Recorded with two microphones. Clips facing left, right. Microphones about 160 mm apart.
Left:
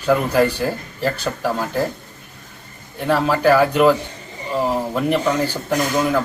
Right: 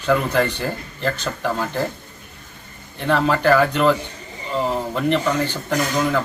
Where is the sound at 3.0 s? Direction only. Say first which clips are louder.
Left 1 dB; 5° left (ahead or behind).